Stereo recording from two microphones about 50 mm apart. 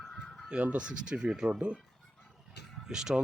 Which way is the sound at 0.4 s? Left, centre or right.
Right.